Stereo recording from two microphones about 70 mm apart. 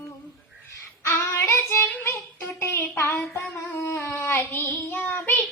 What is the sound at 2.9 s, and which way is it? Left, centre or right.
Child singing, left.